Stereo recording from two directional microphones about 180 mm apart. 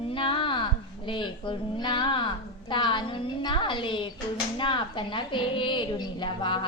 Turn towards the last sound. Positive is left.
turn(degrees=25)  # may be behind; listen again after turning